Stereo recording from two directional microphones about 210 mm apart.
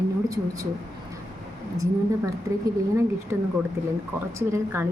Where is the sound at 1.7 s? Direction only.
15° right (ahead or behind).